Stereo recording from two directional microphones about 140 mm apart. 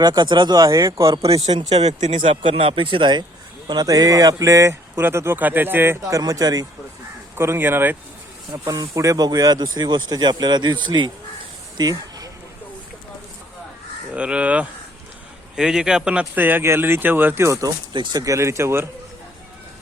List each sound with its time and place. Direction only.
0.0 s speech: 30° right (ahead or behind)
1.3 s speech: 45° right (ahead or behind); by 7.9 s 15° right (ahead or behind)
8.5 s speech: 25° right (ahead or behind)
11.8 s a sound: 25° right (ahead or behind)
14.1 s speech: 10° right (ahead or behind)